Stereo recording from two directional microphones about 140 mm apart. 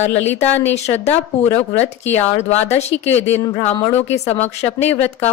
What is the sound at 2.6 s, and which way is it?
Speech, 50° left (ahead or behind).